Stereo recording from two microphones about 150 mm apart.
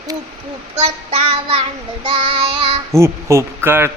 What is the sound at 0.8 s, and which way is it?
Child singing, 40° right (ahead or behind).